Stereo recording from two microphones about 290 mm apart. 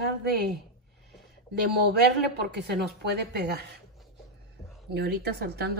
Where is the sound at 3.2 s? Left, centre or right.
Right.